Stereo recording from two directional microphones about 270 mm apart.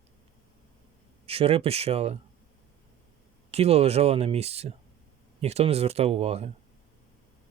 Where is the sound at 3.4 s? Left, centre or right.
Right.